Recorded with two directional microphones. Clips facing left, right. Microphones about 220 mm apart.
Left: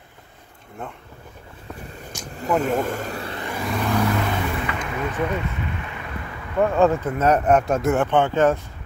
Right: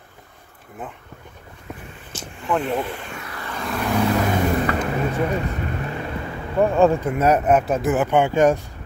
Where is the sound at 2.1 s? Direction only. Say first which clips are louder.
Right 4 dB; 15° left (ahead or behind).